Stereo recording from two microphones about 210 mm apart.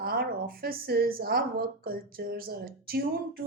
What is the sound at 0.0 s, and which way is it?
A woman's voice, 45° right (ahead or behind).